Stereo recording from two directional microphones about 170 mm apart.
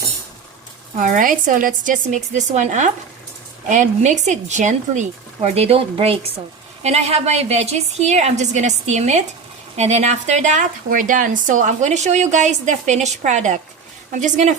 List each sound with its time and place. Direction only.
0.9 s a woman's voice: 50° right (ahead or behind)